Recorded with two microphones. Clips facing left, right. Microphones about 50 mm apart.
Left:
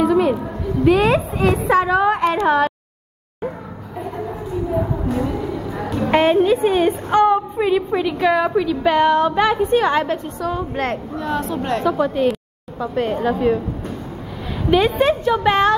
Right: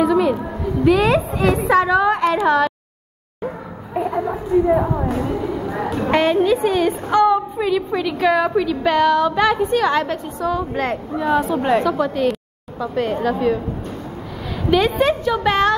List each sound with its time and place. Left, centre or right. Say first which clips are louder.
0.0 s a sound: even; centre
0.8 s a woman's voice: even; centre
5.1 s vehicle: even; centre
5.6 s music: right 3 dB; right
5.9 s a sound: left 1 dB; centre
6.1 s a sound: left 2 dB; centre
7.6 s a woman's voice: left 2 dB; centre
9.0 s a sound: even; left
9.3 s a woman's voice: even; centre
9.6 s a woman's voice: left 1 dB; left
9.8 s a woman's voice: left 1 dB; centre
11.8 s a woman's voice: left 1 dB; centre
14.9 s a woman's voice: left 1 dB; centre